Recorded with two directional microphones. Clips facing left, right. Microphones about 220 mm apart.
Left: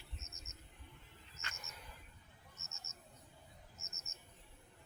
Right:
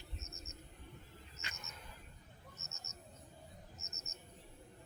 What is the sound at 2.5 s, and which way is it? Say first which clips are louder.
Cricket: right 4 dB; 35° right (ahead or behind).